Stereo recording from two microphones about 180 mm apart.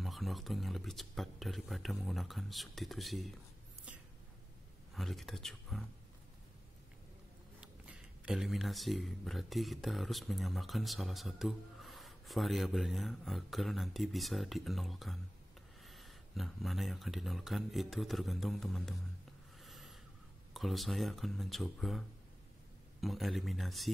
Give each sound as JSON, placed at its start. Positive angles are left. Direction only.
{"t": 0.0, "sound": "speech", "side_deg": 0}
{"t": 4.9, "sound": "speech", "side_deg": 0}
{"t": 7.6, "sound": "speech", "side_deg": -5}
{"t": 19.6, "sound": "a sound", "side_deg": 0}
{"t": 20.5, "sound": "speech", "side_deg": 0}